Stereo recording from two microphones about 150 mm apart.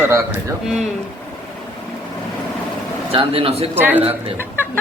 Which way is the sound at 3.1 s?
40° right (ahead or behind).